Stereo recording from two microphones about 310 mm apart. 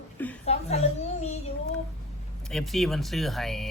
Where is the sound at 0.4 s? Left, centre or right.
Centre.